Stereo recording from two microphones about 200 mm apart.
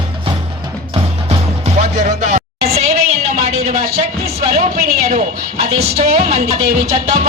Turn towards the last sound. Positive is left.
turn(degrees=-30)  # may be behind; listen again after turning